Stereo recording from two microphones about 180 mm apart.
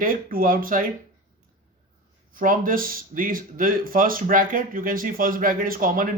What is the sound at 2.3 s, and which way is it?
Speech, 50° right (ahead or behind).